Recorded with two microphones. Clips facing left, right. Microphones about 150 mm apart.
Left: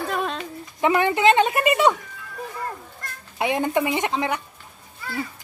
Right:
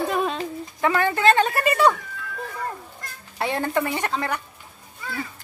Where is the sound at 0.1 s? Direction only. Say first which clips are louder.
Right 2 dB; 5° right (ahead or behind).